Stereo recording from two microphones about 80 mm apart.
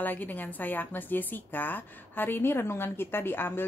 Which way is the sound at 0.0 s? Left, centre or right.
Left.